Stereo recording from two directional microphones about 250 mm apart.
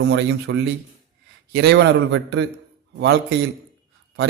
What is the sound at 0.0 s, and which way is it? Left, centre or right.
Speech, right.